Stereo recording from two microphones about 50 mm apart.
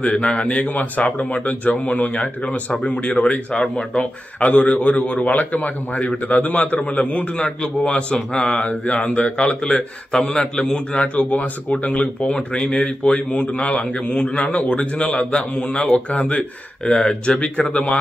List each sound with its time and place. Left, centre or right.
0.0 s a man's voice: left
3.5 s a man's voice: centre